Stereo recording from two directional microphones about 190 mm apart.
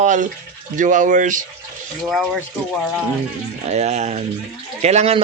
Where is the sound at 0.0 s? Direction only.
40° right (ahead or behind).